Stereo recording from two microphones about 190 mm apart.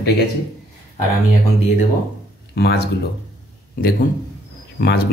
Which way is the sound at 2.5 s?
60° left (ahead or behind).